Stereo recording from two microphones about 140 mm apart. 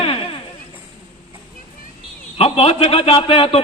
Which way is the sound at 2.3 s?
45° left (ahead or behind).